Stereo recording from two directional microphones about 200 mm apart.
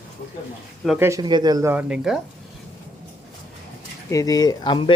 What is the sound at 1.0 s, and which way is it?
Speech, 15° right (ahead or behind).